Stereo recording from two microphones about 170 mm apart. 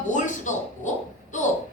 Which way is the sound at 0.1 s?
45° left (ahead or behind).